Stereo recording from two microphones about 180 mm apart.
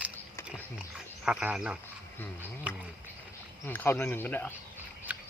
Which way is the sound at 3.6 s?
10° left (ahead or behind).